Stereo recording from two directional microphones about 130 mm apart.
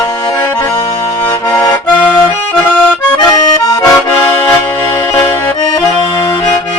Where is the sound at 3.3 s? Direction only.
25° left (ahead or behind).